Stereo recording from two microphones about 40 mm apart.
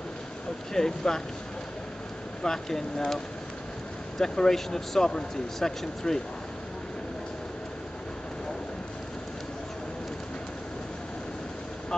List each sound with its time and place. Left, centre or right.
0.7 s speech: centre
2.4 s speech: centre
4.2 s speech: centre